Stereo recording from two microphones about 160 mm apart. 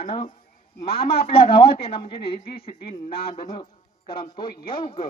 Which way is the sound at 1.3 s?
35° left (ahead or behind).